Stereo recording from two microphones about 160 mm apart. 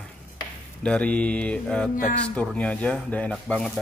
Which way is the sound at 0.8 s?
5° left (ahead or behind).